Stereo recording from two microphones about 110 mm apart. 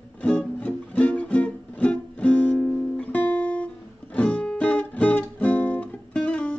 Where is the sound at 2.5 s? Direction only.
Centre (ahead or behind).